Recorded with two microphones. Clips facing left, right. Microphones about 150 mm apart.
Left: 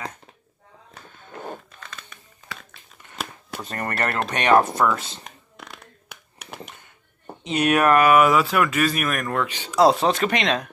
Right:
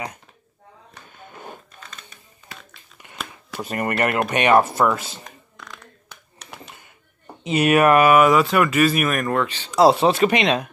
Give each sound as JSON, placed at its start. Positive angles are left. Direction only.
{"t": 3.6, "sound": "speech", "side_deg": -10}
{"t": 5.2, "sound": "a sound", "side_deg": 20}
{"t": 7.4, "sound": "speech", "side_deg": -5}
{"t": 9.5, "sound": "speech", "side_deg": 10}
{"t": 9.8, "sound": "speech", "side_deg": -5}